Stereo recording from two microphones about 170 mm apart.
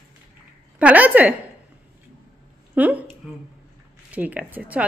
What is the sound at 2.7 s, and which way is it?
A woman's voice, 10° right (ahead or behind).